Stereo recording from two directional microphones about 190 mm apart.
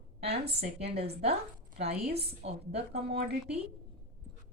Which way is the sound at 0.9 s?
30° right (ahead or behind).